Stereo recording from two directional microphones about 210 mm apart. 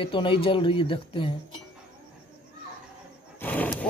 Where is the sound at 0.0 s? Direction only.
25° left (ahead or behind).